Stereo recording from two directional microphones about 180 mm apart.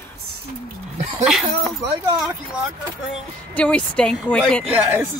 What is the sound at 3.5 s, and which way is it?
Speech, 5° left (ahead or behind).